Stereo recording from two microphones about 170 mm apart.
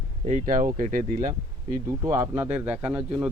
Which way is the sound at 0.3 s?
50° right (ahead or behind).